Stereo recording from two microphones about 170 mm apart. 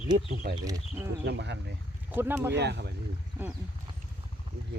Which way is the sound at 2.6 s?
80° right.